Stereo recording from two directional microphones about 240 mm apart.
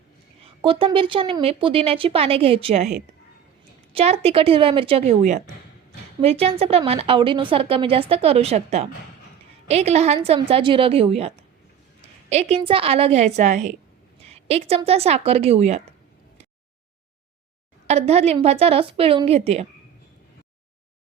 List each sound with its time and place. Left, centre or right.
0.4 s a woman's voice: right
3.9 s a woman's voice: right
17.8 s a woman's voice: right